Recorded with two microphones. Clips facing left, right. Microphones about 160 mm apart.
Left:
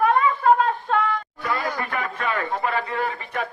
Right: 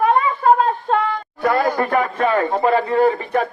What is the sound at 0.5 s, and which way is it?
Shofar, 35° right (ahead or behind).